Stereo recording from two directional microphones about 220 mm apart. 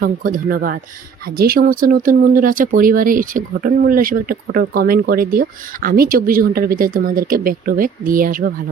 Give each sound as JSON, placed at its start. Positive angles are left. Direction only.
{"t": 0.0, "sound": "speech", "side_deg": -35}